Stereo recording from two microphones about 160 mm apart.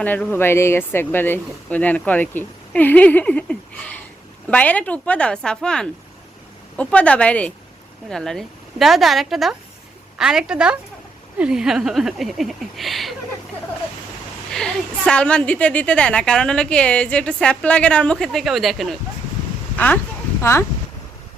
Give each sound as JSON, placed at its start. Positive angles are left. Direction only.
{"t": 0.0, "sound": "a woman's voice", "side_deg": 10}
{"t": 14.5, "sound": "a woman's voice", "side_deg": 5}